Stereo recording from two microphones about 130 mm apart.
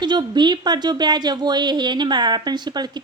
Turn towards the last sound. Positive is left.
turn(degrees=-35)  # may be behind; listen again after turning